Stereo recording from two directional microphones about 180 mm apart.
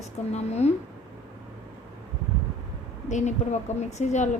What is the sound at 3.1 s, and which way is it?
A woman's voice, 40° left (ahead or behind).